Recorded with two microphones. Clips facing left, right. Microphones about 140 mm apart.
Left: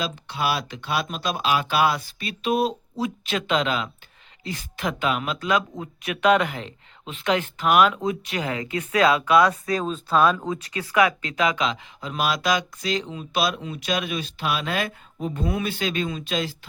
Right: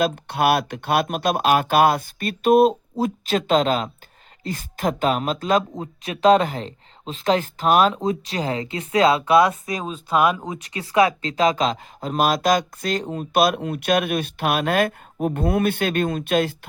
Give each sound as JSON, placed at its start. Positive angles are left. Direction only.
{"t": 0.0, "sound": "speech", "side_deg": -55}